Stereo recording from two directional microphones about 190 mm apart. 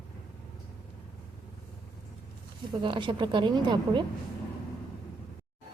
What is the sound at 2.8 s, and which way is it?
A woman's voice, 25° right (ahead or behind).